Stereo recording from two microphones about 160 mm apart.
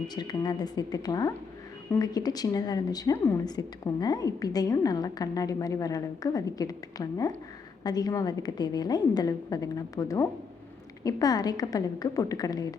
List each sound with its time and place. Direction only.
0.1 s a woman's voice: 25° left (ahead or behind)